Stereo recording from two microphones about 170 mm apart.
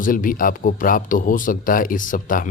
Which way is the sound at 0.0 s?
55° left (ahead or behind).